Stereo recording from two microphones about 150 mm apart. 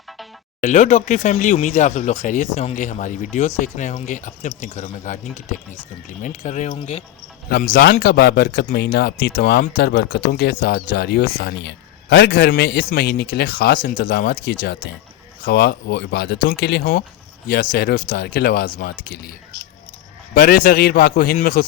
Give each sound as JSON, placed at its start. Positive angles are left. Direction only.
{"t": 0.6, "sound": "speech", "side_deg": 50}
{"t": 7.5, "sound": "a man's voice", "side_deg": 75}
{"t": 20.3, "sound": "a man's voice", "side_deg": 70}